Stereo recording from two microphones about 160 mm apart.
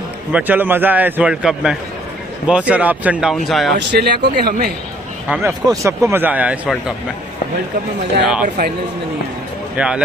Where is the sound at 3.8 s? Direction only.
90° right.